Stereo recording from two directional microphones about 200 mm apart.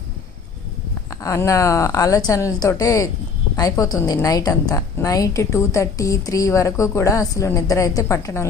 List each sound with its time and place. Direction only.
1.2 s a woman's voice: 15° left (ahead or behind)